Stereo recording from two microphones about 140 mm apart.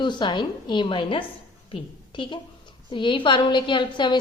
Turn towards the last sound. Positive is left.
turn(degrees=35)  # may be behind; listen again after turning